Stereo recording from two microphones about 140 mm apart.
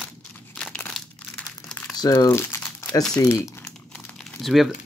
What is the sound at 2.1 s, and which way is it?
Speech, 20° left (ahead or behind).